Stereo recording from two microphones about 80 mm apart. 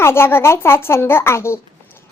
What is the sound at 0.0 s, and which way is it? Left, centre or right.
A child's voice, left.